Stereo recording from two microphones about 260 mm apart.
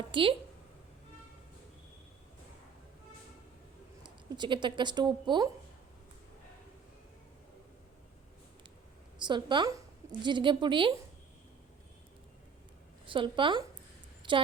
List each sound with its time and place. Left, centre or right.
0.1 s a woman's voice: centre
4.0 s speech: centre
9.2 s a woman's voice: centre
13.1 s a woman's voice: centre
14.2 s a sound: centre